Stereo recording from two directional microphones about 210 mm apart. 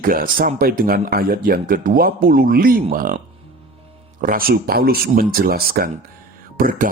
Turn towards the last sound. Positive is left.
turn(degrees=-45)  # may be behind; listen again after turning